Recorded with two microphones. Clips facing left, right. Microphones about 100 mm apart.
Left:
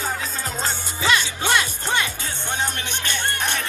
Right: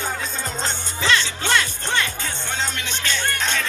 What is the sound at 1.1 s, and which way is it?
Music, 15° left (ahead or behind).